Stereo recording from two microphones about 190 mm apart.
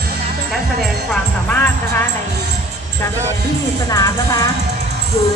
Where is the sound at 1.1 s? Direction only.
10° left (ahead or behind).